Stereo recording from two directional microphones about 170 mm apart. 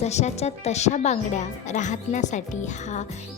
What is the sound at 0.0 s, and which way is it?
Speech, 40° left (ahead or behind).